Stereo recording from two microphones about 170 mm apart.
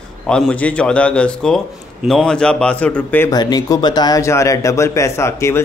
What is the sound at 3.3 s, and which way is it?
Speech, 25° left (ahead or behind).